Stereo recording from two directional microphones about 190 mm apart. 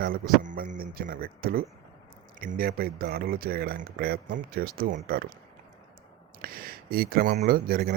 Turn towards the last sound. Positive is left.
turn(degrees=-50)  # may be behind; listen again after turning